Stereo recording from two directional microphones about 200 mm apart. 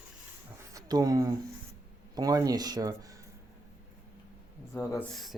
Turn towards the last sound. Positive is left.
turn(degrees=0)  # may be behind; listen again after turning